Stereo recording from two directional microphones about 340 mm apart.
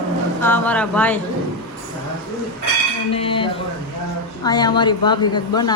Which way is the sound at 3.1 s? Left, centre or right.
Centre.